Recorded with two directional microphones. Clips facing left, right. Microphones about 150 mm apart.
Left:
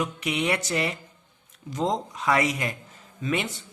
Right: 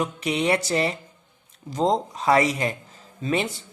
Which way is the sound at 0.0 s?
35° right (ahead or behind).